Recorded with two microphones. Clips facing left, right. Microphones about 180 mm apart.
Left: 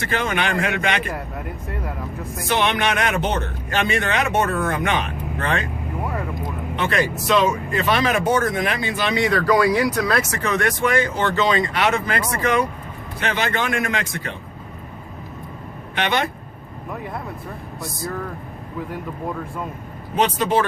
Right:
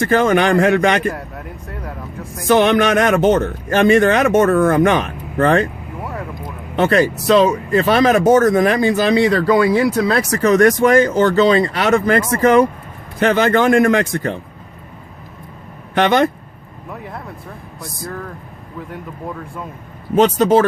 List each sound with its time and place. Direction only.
0.0 s a man's voice: 45° right (ahead or behind)
2.4 s a man's voice: 45° right (ahead or behind)
6.7 s a man's voice: 40° right (ahead or behind)
16.9 s speech: centre (ahead or behind)
20.1 s a man's voice: 45° right (ahead or behind)